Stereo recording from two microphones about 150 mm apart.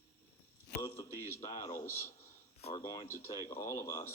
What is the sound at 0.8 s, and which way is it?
A man's voice, 20° left (ahead or behind).